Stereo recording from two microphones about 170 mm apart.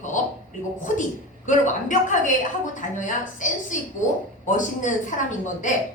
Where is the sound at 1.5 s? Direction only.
45° left (ahead or behind).